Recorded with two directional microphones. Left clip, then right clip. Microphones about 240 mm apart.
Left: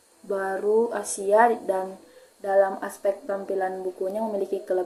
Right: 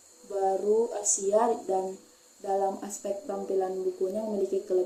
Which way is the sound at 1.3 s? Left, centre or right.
Left.